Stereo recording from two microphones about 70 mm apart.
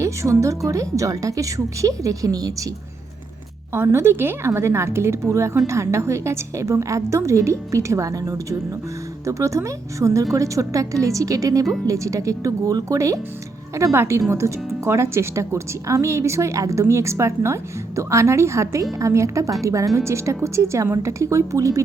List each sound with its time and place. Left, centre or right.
0.0 s a woman's voice: right
3.7 s a woman's voice: right
13.9 s a woman's voice: right